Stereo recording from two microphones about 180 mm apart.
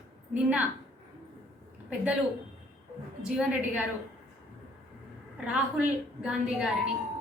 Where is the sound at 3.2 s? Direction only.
5° right (ahead or behind).